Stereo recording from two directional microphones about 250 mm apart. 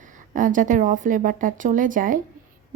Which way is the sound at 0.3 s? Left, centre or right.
Right.